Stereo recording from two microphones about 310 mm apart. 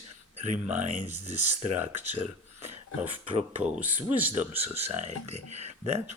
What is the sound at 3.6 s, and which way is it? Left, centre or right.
Speech, centre.